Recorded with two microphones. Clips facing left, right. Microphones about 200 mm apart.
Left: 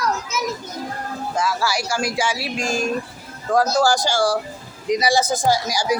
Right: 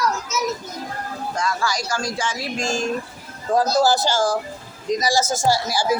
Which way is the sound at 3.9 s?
15° left (ahead or behind).